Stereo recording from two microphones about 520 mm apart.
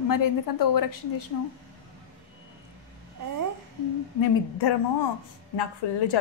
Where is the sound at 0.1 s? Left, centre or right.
Left.